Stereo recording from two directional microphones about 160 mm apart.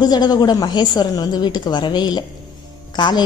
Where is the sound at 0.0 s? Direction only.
25° left (ahead or behind).